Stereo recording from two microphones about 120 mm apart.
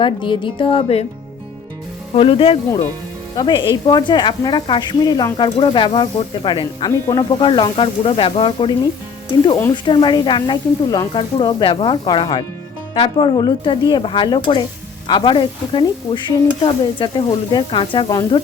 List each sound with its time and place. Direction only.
0.0 s speech: 45° left (ahead or behind)
2.1 s speech: 50° left (ahead or behind)
3.3 s speech: 40° left (ahead or behind)
9.7 s speech: 45° left (ahead or behind)